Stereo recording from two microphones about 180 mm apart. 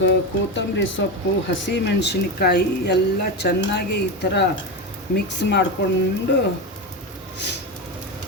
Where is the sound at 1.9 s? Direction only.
70° left (ahead or behind).